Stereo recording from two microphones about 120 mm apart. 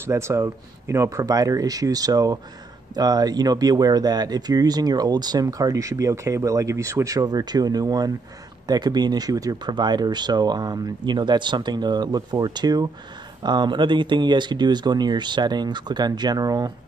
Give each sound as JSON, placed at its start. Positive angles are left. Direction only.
{"t": 0.0, "sound": "speech", "side_deg": -25}